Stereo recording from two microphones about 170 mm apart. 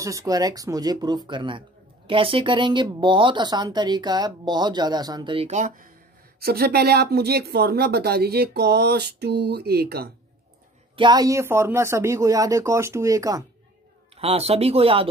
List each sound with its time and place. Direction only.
0.0 s a woman's voice: 20° right (ahead or behind)
5.5 s speech: 45° right (ahead or behind)
6.4 s speech: 65° right (ahead or behind)
11.0 s speech: 25° right (ahead or behind)
14.1 s speech: 35° right (ahead or behind)